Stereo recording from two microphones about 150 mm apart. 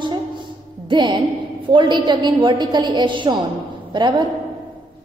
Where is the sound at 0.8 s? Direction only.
30° right (ahead or behind).